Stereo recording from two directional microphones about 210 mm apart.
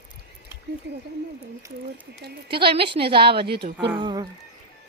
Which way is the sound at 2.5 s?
25° right (ahead or behind).